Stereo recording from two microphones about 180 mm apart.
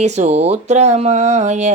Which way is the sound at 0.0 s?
40° right (ahead or behind).